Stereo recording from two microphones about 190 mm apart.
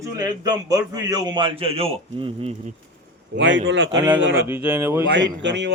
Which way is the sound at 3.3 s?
70° right (ahead or behind).